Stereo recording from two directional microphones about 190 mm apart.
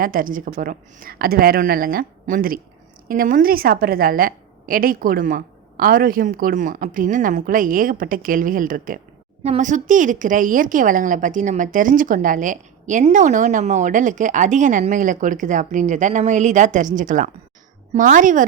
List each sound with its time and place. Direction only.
0.0 s a woman's voice: 45° right (ahead or behind)